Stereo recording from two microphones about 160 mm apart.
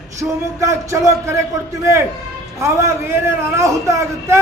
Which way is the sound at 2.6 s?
20° right (ahead or behind).